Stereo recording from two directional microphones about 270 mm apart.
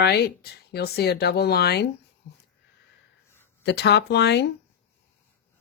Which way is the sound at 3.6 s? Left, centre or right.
Left.